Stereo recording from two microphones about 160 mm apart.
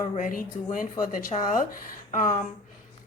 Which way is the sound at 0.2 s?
60° left (ahead or behind).